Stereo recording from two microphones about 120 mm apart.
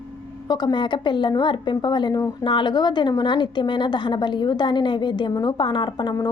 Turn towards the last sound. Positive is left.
turn(degrees=35)  # may be behind; listen again after turning